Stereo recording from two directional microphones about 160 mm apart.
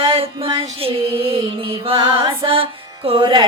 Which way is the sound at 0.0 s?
35° right (ahead or behind).